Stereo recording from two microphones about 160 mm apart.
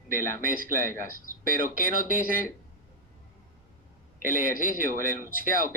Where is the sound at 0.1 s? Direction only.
60° right (ahead or behind).